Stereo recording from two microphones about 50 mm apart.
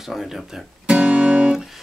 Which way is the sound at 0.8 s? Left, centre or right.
Right.